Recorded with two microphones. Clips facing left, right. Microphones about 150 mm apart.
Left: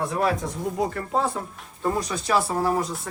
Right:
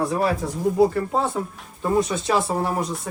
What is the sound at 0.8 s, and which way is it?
Speech, 30° right (ahead or behind).